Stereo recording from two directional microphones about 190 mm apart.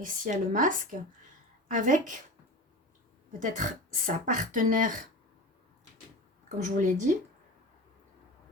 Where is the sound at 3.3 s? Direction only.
45° right (ahead or behind).